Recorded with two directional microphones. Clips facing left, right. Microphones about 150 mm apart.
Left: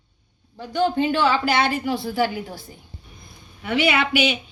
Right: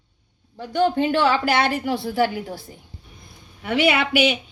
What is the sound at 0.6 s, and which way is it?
A woman's voice, 65° right (ahead or behind).